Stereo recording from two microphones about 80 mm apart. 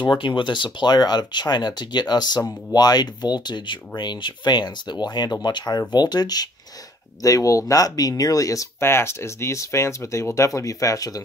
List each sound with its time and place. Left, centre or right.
0.0 s speech: left
7.2 s speech: left
8.8 s speech: left